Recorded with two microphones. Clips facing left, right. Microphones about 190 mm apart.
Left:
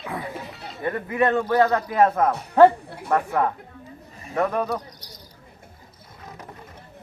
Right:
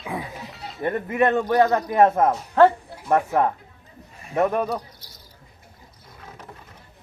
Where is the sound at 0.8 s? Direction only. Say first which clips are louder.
Right 1 dB; 20° right (ahead or behind).